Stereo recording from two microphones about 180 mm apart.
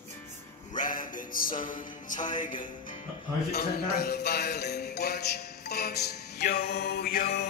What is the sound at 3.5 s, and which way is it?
Music, 60° left (ahead or behind).